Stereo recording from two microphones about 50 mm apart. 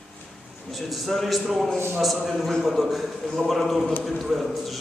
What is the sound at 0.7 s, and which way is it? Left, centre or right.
A man's voice, centre.